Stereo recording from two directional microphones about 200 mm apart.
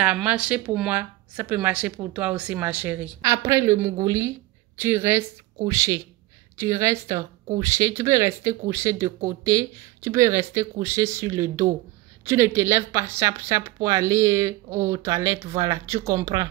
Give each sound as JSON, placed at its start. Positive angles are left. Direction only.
{"t": 0.0, "sound": "speech", "side_deg": -5}